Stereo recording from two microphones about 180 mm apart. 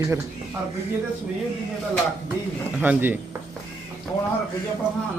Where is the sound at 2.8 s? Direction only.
10° right (ahead or behind).